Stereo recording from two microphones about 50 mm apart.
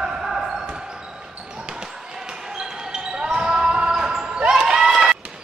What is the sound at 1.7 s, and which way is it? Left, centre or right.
Basketball bounce, centre.